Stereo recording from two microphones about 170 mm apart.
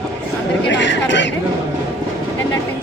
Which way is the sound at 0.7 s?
90° left.